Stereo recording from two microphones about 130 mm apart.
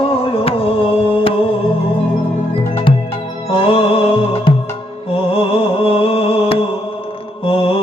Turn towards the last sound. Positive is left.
turn(degrees=45)  # may be behind; listen again after turning